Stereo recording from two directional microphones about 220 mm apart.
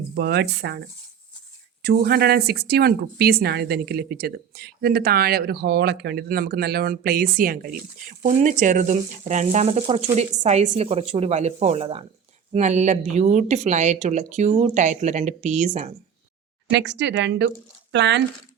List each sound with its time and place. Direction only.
0.2 s speech: 45° right (ahead or behind)
1.8 s speech: 45° right (ahead or behind)
16.7 s speech: 55° right (ahead or behind)